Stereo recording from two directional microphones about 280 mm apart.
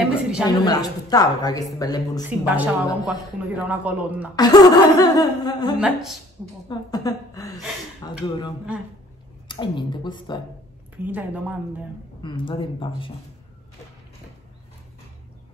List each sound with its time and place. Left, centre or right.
0.0 s a sound: centre
0.5 s a woman's voice: centre
2.2 s a man's voice: centre
4.4 s a woman's voice: centre
5.8 s a man's voice: centre
6.7 s a woman's voice: centre
9.5 s a woman's voice: centre
11.1 s a man's voice: centre
12.2 s speech: centre